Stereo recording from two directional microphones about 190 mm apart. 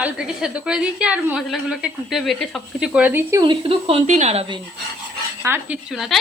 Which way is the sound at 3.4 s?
30° right (ahead or behind).